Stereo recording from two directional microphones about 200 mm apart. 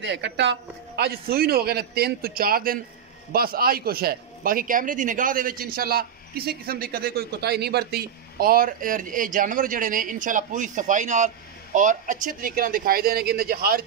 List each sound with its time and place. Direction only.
0.0 s a man's voice: 60° right (ahead or behind)